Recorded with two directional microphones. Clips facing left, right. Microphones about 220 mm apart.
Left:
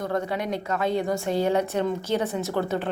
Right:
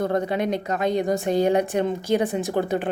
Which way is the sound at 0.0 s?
20° right (ahead or behind).